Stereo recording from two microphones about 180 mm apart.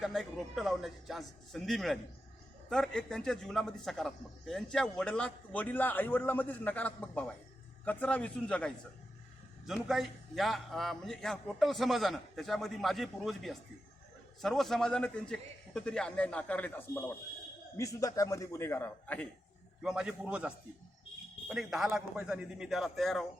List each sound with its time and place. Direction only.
0.0 s a man's voice: centre (ahead or behind)
19.8 s a man's voice: 5° right (ahead or behind)